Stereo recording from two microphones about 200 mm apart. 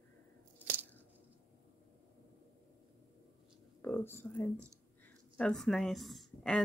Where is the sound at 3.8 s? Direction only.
10° left (ahead or behind).